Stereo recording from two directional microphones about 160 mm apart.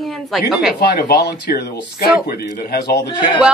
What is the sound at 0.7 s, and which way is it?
Speech, 80° left.